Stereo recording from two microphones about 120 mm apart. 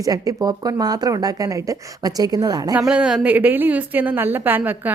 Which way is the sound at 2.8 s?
10° right (ahead or behind).